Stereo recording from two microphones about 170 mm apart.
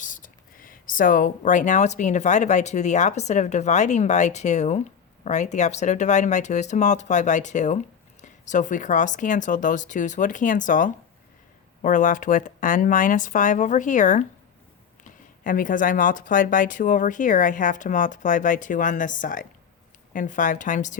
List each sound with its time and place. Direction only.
0.0 s speech: 50° left (ahead or behind)
15.4 s speech: 50° left (ahead or behind)